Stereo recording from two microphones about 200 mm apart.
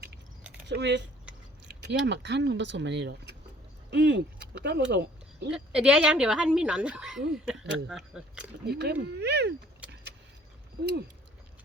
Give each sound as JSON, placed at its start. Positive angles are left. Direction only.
{"t": 0.7, "sound": "speech", "side_deg": -60}
{"t": 5.5, "sound": "speech", "side_deg": -5}
{"t": 8.6, "sound": "speech", "side_deg": -55}